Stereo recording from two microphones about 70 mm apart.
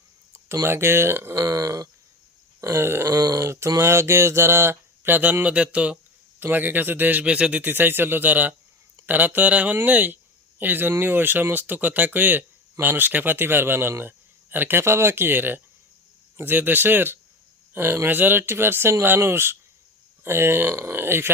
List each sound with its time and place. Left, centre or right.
0.3 s speech: right
1.4 s speech: right
2.6 s speech: right
3.1 s speech: right; by 7.6 s centre
7.6 s speech: right